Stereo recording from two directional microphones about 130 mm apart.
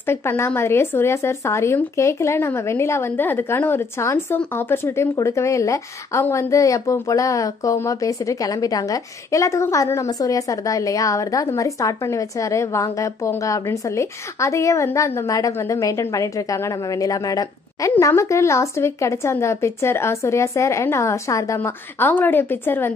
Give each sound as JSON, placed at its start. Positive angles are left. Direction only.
{"t": 0.0, "sound": "a woman's voice", "side_deg": 20}